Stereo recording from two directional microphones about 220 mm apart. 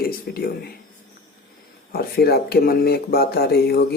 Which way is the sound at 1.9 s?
45° left (ahead or behind).